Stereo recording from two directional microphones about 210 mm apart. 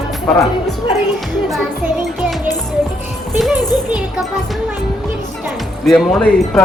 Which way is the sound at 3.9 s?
5° right (ahead or behind).